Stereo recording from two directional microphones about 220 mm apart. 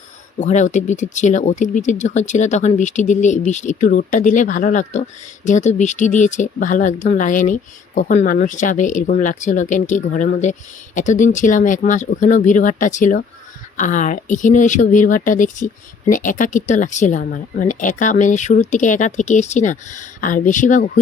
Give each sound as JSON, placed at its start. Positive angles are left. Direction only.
{"t": 0.3, "sound": "speech", "side_deg": 35}